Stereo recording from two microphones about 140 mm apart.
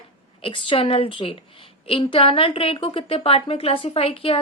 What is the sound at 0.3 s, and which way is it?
A woman's voice, 40° left (ahead or behind).